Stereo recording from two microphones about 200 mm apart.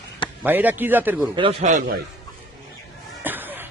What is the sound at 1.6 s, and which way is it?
Speech, 40° right (ahead or behind).